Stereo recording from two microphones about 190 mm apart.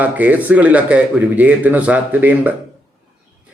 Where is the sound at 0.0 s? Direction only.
10° right (ahead or behind).